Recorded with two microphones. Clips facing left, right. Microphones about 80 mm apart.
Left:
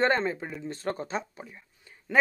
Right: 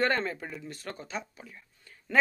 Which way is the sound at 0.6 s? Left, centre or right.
Left.